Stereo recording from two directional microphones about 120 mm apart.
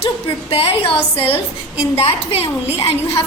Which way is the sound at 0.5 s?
50° left (ahead or behind).